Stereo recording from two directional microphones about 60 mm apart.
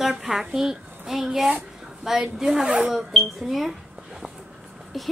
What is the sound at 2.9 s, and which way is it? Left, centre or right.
Speech, centre.